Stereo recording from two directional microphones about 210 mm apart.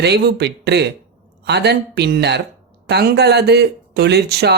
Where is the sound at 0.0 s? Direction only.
55° right (ahead or behind).